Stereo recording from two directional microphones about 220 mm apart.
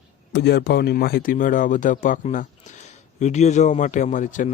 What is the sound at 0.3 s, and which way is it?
Speech, 45° left (ahead or behind).